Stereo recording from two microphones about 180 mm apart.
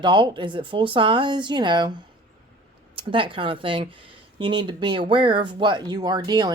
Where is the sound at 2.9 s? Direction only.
30° right (ahead or behind).